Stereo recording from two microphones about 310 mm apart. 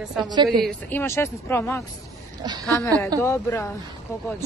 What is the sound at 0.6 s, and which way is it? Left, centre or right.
Speech, centre.